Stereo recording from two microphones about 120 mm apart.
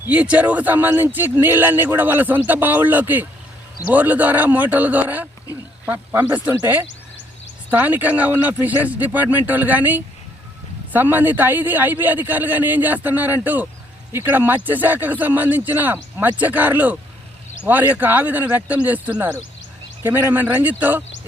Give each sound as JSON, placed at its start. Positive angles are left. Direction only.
{"t": 0.0, "sound": "speech", "side_deg": -10}